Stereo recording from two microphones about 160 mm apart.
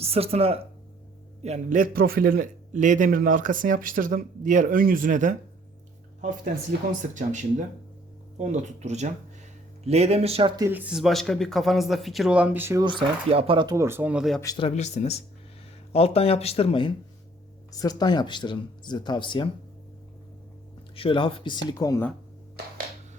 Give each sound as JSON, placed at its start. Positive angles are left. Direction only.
{"t": 0.0, "sound": "a man's voice", "side_deg": -40}
{"t": 7.1, "sound": "speech", "side_deg": -50}
{"t": 10.6, "sound": "speech", "side_deg": -10}
{"t": 12.8, "sound": "speech", "side_deg": -30}
{"t": 14.4, "sound": "speech", "side_deg": 25}
{"t": 14.8, "sound": "speech", "side_deg": 45}
{"t": 17.7, "sound": "speech", "side_deg": 25}
{"t": 20.9, "sound": "speech", "side_deg": 35}